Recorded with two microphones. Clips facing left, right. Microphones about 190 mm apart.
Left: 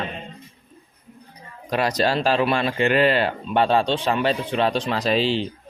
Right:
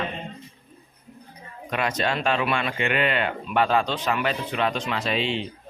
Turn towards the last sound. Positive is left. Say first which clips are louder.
# left 5 dB
turn(degrees=35)  # may be behind; listen again after turning